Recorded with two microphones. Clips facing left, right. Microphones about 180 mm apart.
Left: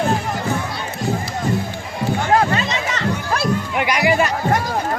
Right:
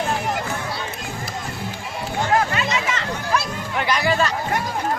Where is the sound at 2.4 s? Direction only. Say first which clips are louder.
Left 3 dB; 35° left (ahead or behind).